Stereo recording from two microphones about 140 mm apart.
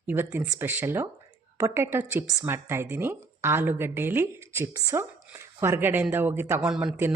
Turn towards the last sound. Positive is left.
turn(degrees=-5)  # may be behind; listen again after turning